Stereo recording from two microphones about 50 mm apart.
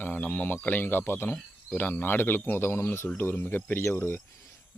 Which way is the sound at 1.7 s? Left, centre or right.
Left.